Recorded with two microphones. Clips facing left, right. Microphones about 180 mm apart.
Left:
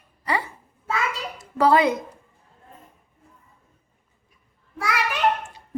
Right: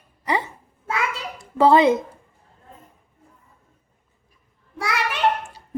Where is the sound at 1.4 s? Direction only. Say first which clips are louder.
Right 3 dB; 25° right (ahead or behind).